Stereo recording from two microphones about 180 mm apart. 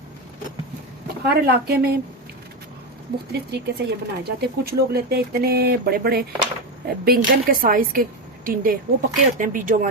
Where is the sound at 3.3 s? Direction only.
65° right (ahead or behind).